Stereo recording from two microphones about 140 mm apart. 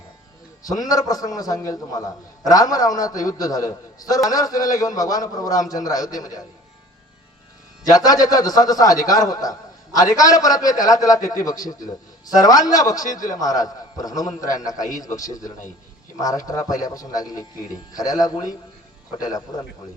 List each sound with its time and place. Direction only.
0.6 s a man's voice: 25° left (ahead or behind)
7.9 s a man's voice: 25° left (ahead or behind)